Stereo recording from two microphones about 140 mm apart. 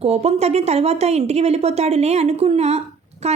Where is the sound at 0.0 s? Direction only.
50° right (ahead or behind).